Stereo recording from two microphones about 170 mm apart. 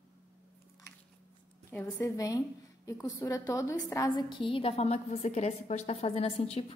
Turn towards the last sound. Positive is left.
turn(degrees=35)  # may be behind; listen again after turning